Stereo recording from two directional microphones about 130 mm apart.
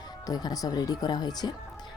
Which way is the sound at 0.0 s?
30° left (ahead or behind).